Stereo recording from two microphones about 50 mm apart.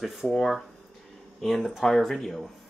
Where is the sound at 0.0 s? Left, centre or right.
Centre.